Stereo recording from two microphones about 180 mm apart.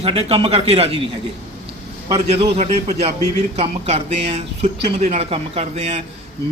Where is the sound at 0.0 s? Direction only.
35° right (ahead or behind).